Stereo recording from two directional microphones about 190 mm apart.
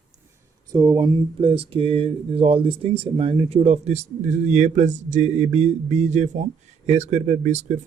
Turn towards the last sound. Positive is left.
turn(degrees=-40)  # may be behind; listen again after turning